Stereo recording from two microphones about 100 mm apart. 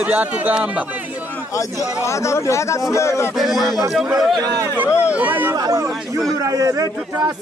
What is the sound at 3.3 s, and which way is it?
Speech, centre (ahead or behind).